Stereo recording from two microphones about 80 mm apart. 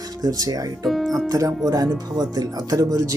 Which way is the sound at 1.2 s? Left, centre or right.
Right.